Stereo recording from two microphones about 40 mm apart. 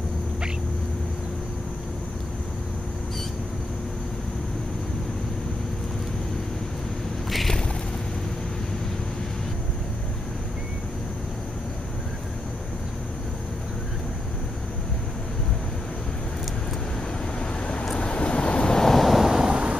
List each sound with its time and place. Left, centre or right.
7.2 s a sound: centre
17.4 s vehicle: left; by 19.5 s centre
19.5 s vehicle: right